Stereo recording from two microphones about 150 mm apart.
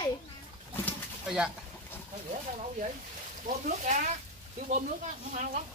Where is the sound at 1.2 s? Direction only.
5° right (ahead or behind).